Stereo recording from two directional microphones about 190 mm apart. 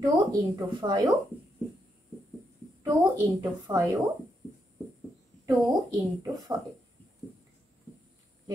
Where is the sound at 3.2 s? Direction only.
15° right (ahead or behind).